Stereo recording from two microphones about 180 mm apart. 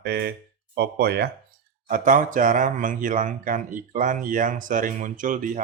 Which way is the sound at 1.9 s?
45° right (ahead or behind).